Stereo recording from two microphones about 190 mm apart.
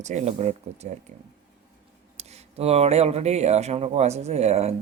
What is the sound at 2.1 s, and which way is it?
Speech, 35° right (ahead or behind).